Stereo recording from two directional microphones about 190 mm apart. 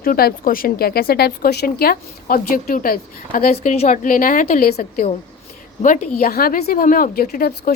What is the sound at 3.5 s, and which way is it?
A woman's voice, 35° left (ahead or behind).